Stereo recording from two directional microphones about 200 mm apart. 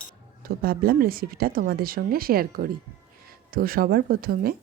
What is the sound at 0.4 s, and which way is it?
Speech, 50° right (ahead or behind).